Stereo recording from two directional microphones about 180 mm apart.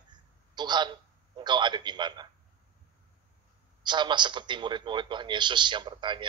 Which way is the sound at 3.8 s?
25° right (ahead or behind).